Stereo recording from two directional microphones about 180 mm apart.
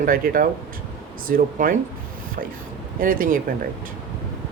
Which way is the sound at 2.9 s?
50° right (ahead or behind).